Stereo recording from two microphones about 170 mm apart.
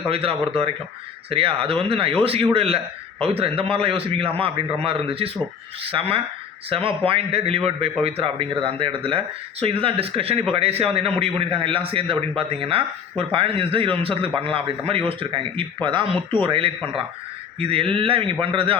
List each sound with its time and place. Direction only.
0.1 s a man's voice: 35° right (ahead or behind)